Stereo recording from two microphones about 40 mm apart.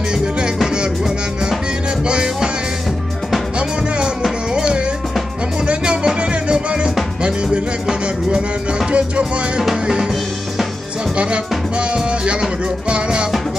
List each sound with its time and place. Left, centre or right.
2.0 s music: right
4.2 s music: right
8.3 s music: right
9.2 s music: centre
11.9 s music: right